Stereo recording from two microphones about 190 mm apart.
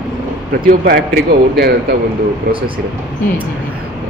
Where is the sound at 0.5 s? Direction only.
50° right (ahead or behind).